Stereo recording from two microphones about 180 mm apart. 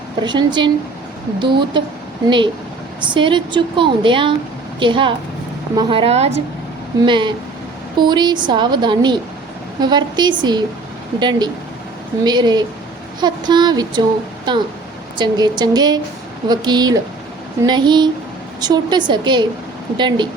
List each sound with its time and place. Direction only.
0.2 s a woman's voice: 25° right (ahead or behind)
3.0 s a woman's voice: 25° right (ahead or behind)